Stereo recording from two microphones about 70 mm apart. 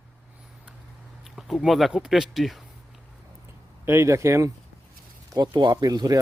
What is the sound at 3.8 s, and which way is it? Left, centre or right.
Speech, right.